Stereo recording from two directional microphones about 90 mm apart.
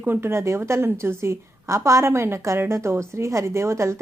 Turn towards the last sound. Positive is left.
turn(degrees=-30)  # may be behind; listen again after turning